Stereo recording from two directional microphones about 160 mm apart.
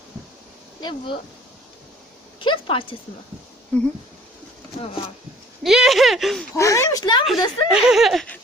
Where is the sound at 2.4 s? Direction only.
30° left (ahead or behind).